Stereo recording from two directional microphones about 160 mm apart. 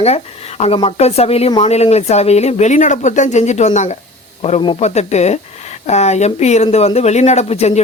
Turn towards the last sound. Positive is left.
turn(degrees=40)  # may be behind; listen again after turning